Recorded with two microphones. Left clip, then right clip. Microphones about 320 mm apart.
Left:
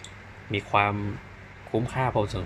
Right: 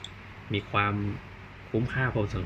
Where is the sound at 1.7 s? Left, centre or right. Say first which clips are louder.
Left 3 dB; left.